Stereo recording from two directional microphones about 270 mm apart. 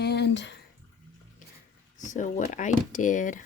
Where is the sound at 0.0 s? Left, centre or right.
Left.